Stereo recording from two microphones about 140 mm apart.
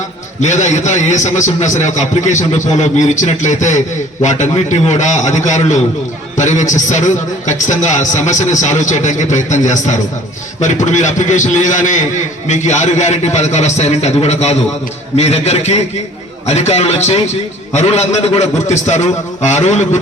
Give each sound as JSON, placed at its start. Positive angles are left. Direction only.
{"t": 0.4, "sound": "a man's voice", "side_deg": 60}